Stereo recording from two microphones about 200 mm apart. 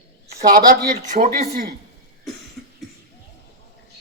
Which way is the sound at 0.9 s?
45° right (ahead or behind).